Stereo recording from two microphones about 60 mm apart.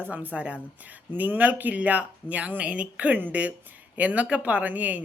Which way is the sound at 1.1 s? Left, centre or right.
Right.